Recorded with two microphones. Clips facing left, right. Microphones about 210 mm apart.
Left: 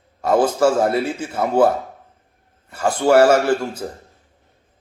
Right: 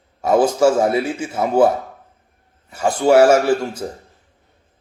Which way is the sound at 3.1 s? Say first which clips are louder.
Right 1 dB; centre (ahead or behind).